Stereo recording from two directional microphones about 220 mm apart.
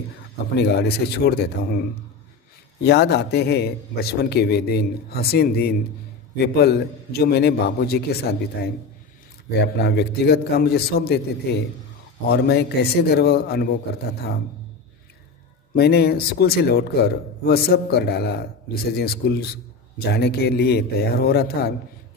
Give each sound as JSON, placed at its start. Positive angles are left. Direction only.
{"t": 0.6, "sound": "a man's voice", "side_deg": 50}
{"t": 2.8, "sound": "a man's voice", "side_deg": 50}
{"t": 12.3, "sound": "a man's voice", "side_deg": 45}
{"t": 15.7, "sound": "a man's voice", "side_deg": 45}